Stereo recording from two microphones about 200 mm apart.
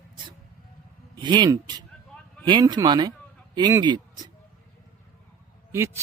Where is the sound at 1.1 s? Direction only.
20° right (ahead or behind).